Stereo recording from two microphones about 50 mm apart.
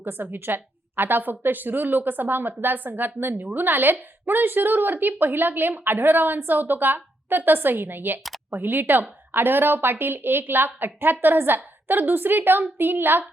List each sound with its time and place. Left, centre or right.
0.0 s a woman's voice: right